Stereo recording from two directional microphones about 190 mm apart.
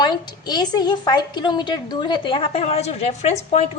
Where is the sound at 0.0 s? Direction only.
20° left (ahead or behind).